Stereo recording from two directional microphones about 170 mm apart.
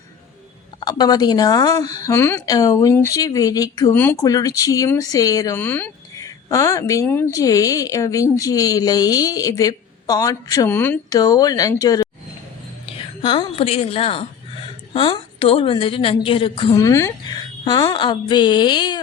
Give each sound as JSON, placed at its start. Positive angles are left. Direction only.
{"t": 0.8, "sound": "speech", "side_deg": 25}
{"t": 12.8, "sound": "a woman's voice", "side_deg": 35}
{"t": 16.7, "sound": "speech", "side_deg": 20}